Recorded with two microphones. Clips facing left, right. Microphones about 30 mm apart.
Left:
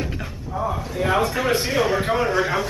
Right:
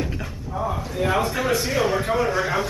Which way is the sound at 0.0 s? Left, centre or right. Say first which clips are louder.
Even; centre.